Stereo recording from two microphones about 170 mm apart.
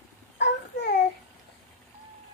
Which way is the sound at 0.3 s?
85° left.